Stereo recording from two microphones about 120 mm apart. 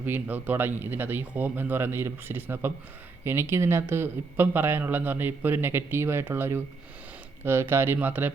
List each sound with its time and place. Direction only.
0.0 s speech: 15° right (ahead or behind)